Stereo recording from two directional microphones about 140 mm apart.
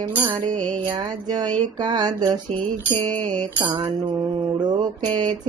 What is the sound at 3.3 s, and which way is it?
Music, 30° right (ahead or behind).